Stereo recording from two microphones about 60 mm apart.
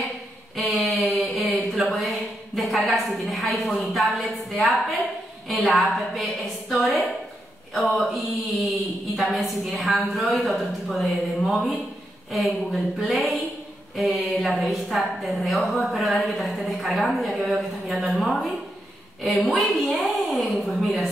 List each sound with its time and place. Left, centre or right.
0.6 s a sound: centre
2.9 s a woman's voice: centre
19.5 s a woman's voice: centre